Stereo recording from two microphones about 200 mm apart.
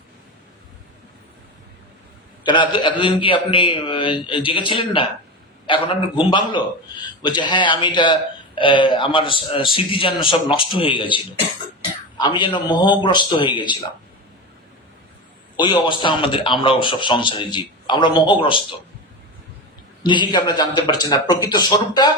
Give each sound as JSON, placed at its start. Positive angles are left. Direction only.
{"t": 2.4, "sound": "speech", "side_deg": 25}
{"t": 12.2, "sound": "speech", "side_deg": 25}
{"t": 15.5, "sound": "speech", "side_deg": 20}
{"t": 20.0, "sound": "speech", "side_deg": 20}